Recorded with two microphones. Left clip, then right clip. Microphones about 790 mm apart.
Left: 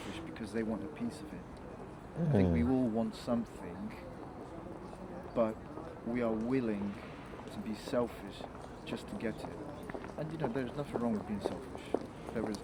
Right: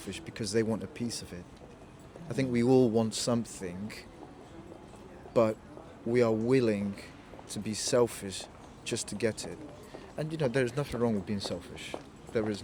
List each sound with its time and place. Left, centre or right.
0.3 s speech: right
2.4 s speech: right
5.3 s speech: right